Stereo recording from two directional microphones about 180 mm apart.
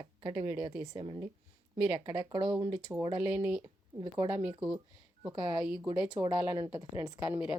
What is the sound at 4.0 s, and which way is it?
A woman's voice, 25° right (ahead or behind).